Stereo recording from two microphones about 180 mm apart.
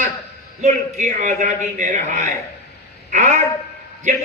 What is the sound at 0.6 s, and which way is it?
A man's voice, 40° right (ahead or behind).